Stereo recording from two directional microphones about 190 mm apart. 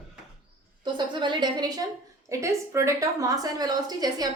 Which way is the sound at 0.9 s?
25° right (ahead or behind).